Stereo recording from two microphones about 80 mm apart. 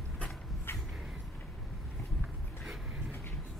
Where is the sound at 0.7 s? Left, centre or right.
Left.